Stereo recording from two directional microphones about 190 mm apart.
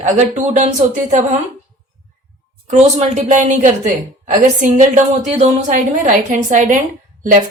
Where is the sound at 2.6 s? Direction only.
35° right (ahead or behind).